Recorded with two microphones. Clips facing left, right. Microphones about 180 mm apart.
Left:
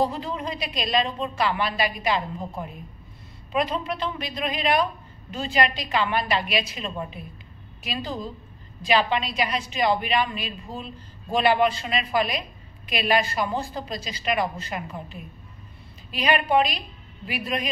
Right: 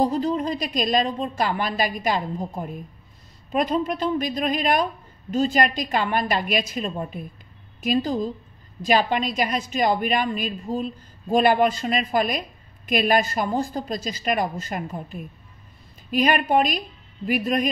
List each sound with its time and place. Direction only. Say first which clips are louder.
0.0 s a woman's voice: right 4 dB; 40° right (ahead or behind)